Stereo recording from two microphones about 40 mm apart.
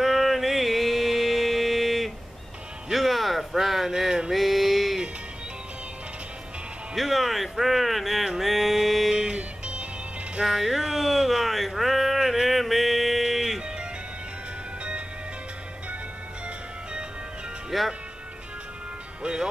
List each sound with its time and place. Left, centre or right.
0.0 s music: centre
4.4 s a sound: centre
7.0 s speech: centre
8.4 s music: centre
9.3 s music: right
10.4 s a sound: centre
14.8 s music: right
17.6 s music: centre
19.2 s music: centre